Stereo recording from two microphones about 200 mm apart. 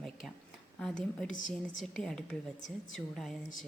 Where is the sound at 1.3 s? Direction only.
40° left (ahead or behind).